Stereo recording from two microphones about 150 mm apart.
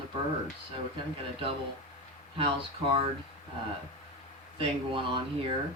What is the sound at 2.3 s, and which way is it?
Speech, 35° right (ahead or behind).